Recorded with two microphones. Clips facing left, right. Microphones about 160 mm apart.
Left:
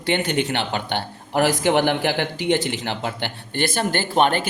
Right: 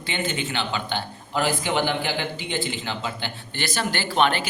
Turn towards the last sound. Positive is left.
turn(degrees=45)  # may be behind; listen again after turning